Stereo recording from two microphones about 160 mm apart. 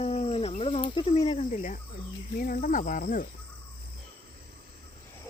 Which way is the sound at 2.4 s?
60° left (ahead or behind).